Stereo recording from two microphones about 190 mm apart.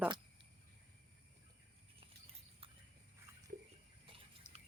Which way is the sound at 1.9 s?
30° right (ahead or behind).